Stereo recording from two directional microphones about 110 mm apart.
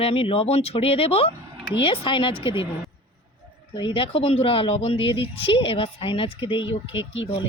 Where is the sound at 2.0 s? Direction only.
50° left (ahead or behind).